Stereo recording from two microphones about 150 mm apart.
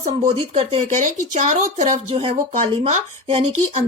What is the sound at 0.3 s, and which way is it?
A woman's voice, 40° right (ahead or behind).